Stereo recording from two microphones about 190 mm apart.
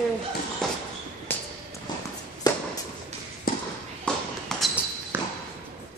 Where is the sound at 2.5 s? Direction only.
20° left (ahead or behind).